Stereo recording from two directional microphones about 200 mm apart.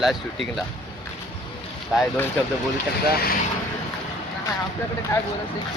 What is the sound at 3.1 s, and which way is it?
Speech, 50° left (ahead or behind).